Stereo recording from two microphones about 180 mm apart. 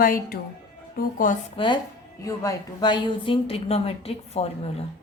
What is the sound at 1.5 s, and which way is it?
A woman's voice, 25° left (ahead or behind).